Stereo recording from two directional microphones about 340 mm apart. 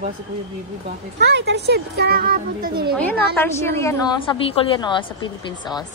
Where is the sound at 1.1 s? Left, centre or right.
Right.